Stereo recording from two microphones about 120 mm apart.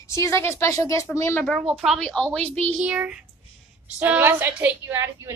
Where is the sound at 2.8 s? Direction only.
10° right (ahead or behind).